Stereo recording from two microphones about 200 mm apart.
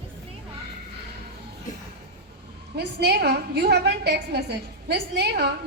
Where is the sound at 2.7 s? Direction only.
55° right (ahead or behind).